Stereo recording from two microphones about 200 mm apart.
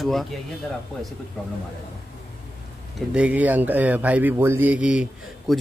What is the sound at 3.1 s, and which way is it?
Speech, 5° right (ahead or behind).